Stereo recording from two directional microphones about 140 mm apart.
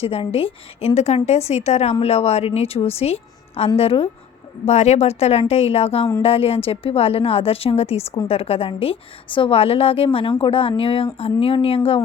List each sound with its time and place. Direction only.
0.0 s a woman's voice: 45° left (ahead or behind)